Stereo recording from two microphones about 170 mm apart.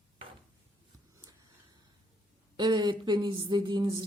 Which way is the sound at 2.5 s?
25° right (ahead or behind).